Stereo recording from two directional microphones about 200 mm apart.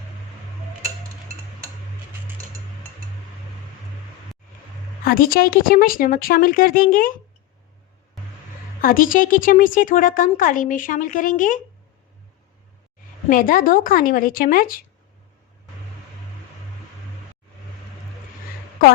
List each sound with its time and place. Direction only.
5.0 s speech: 45° left (ahead or behind)
8.8 s a woman's voice: 45° left (ahead or behind)
13.3 s speech: 45° left (ahead or behind)